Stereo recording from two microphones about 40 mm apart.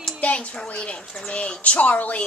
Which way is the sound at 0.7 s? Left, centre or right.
Left.